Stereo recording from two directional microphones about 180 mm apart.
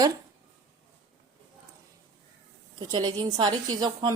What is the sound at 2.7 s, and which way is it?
Speech, 25° right (ahead or behind).